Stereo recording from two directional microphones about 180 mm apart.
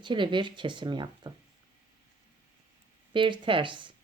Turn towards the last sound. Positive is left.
turn(degrees=-25)  # may be behind; listen again after turning